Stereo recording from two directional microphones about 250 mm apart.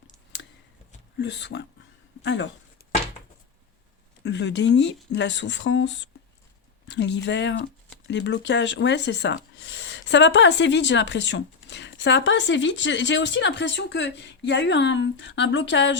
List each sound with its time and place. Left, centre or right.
1.2 s speech: left
4.2 s speech: left